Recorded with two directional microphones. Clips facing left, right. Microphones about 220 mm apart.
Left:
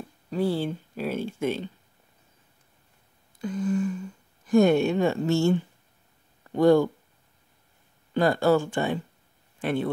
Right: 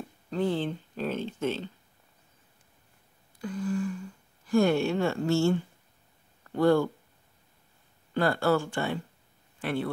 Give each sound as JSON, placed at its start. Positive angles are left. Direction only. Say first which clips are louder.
{"t": 0.3, "sound": "speech", "louder": "left 2 dB", "side_deg": 10}
{"t": 3.3, "sound": "speech", "louder": "left 4 dB", "side_deg": 20}
{"t": 8.1, "sound": "speech", "louder": "left 4 dB", "side_deg": 15}